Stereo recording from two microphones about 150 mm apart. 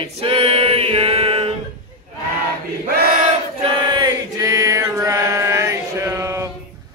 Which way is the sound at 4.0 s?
25° right (ahead or behind).